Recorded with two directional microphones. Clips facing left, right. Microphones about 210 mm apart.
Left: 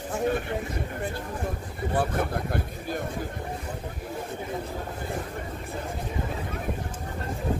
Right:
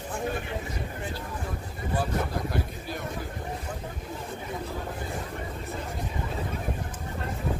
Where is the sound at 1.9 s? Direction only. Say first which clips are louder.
Left 2 dB; 55° left (ahead or behind).